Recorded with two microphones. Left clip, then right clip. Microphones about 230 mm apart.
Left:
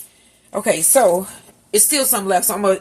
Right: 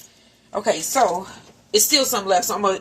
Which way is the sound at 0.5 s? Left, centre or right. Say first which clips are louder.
Left 4 dB; left.